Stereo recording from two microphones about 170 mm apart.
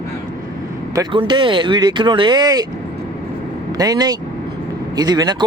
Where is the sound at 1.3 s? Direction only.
30° right (ahead or behind).